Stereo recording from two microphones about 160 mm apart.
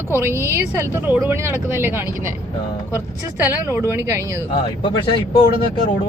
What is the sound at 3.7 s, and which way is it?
Speech, 15° right (ahead or behind).